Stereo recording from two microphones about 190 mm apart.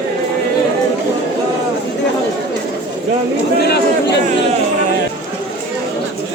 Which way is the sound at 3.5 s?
60° left (ahead or behind).